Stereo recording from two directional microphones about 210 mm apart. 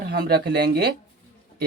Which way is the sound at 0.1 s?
45° right (ahead or behind).